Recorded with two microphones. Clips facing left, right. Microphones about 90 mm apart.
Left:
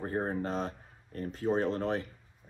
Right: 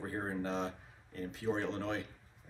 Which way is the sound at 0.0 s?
40° left (ahead or behind).